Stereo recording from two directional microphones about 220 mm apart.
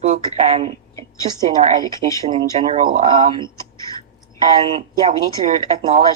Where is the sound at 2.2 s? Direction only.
30° right (ahead or behind).